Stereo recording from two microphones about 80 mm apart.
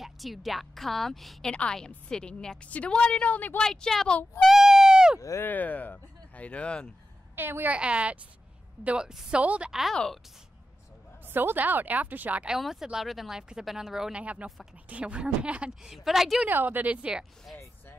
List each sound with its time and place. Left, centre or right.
0.0 s a woman's voice: centre
3.6 s a woman's voice: centre
5.4 s speech: left
7.3 s a woman's voice: right
7.7 s a woman's voice: centre
9.7 s speech: centre
11.2 s a woman's voice: right
12.5 s speech: centre
14.2 s a woman's voice: centre
16.4 s a woman's voice: right